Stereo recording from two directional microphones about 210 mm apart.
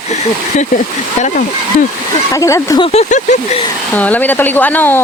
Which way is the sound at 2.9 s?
35° left (ahead or behind).